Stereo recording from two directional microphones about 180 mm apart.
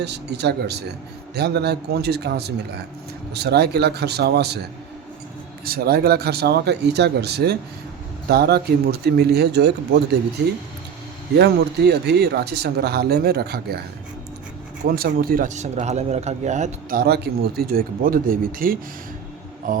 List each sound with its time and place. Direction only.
0.0 s speech: 70° right (ahead or behind)
11.3 s speech: 65° right (ahead or behind)
14.8 s speech: 55° right (ahead or behind); by 17.0 s 40° right (ahead or behind)
17.0 s speech: 60° right (ahead or behind)